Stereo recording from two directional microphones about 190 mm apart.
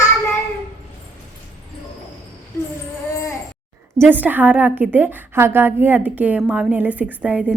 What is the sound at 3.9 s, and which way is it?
A woman's voice, 10° right (ahead or behind).